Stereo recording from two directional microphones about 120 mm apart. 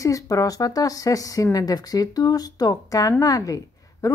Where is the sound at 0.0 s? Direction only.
30° left (ahead or behind).